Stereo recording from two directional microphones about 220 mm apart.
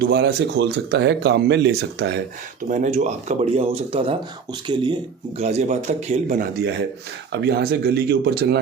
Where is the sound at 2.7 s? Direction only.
35° right (ahead or behind).